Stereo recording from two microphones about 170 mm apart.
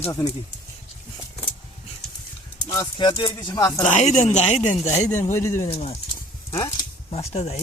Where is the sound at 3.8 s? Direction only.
45° left (ahead or behind).